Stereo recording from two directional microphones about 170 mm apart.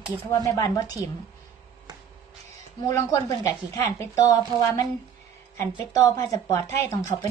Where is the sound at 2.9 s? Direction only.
15° left (ahead or behind).